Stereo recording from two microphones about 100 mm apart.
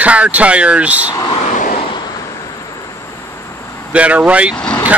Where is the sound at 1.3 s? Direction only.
90° left.